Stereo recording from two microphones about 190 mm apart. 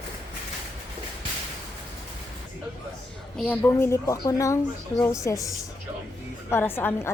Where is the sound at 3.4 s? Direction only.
5° left (ahead or behind).